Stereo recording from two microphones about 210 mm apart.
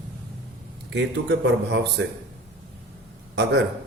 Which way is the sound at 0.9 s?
55° right (ahead or behind).